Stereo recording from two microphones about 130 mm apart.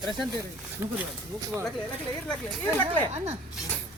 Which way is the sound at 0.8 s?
20° right (ahead or behind).